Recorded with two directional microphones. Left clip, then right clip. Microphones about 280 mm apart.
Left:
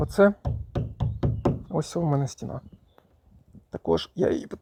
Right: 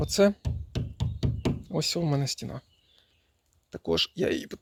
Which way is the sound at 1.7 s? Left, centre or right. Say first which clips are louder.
Left 2 dB; centre.